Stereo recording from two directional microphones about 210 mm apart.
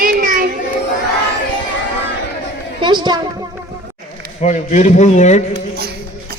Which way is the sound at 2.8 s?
20° right (ahead or behind).